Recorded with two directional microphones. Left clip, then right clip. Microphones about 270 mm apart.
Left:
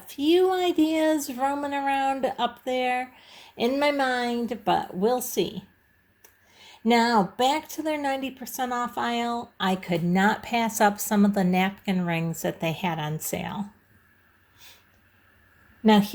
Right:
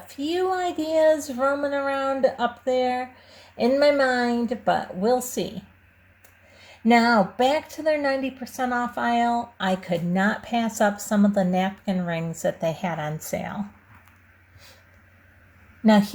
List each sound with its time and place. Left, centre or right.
0.2 s a woman's voice: left
6.8 s a woman's voice: left
15.8 s a woman's voice: left